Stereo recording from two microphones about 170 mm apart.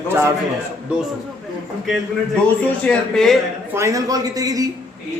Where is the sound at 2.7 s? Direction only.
5° left (ahead or behind).